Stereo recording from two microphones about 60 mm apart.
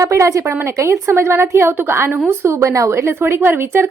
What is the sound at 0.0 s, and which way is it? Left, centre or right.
Speech, right.